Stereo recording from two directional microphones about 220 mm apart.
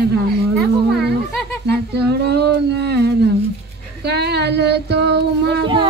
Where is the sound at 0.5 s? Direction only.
Centre (ahead or behind).